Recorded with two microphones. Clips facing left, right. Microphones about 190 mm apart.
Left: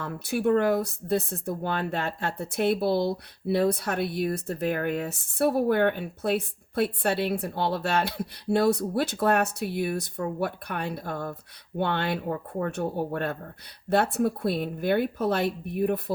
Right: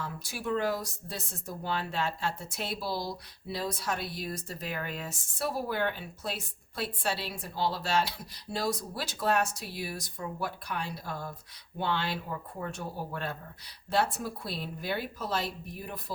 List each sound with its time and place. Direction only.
0.0 s speech: 60° left (ahead or behind)